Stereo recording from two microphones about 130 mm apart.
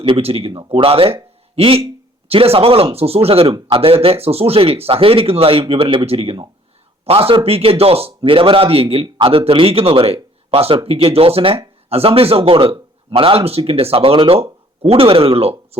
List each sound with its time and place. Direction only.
0.1 s speech: 50° right (ahead or behind)